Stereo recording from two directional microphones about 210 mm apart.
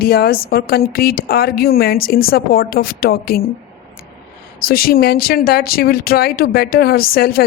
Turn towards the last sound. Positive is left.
turn(degrees=45)  # may be behind; listen again after turning